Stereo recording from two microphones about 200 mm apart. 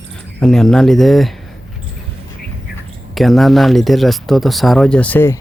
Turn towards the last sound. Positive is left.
turn(degrees=10)  # may be behind; listen again after turning